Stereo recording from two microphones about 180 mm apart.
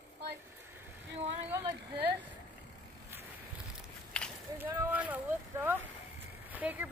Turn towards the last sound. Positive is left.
turn(degrees=-10)  # may be behind; listen again after turning